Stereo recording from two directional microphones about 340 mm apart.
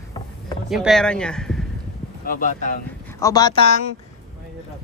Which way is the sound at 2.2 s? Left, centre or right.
Left.